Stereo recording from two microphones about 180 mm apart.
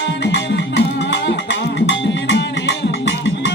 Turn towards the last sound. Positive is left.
turn(degrees=70)  # may be behind; listen again after turning